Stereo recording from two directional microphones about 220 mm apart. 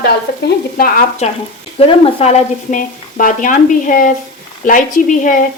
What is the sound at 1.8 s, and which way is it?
Speech, 25° left (ahead or behind).